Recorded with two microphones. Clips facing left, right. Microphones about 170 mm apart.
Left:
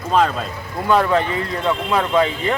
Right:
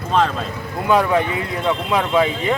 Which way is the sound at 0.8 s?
10° right (ahead or behind).